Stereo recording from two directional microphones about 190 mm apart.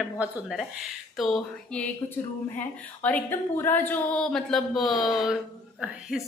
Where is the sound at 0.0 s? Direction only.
Centre (ahead or behind).